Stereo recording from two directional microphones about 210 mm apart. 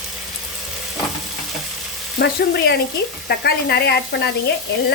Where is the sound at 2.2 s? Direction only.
50° left (ahead or behind).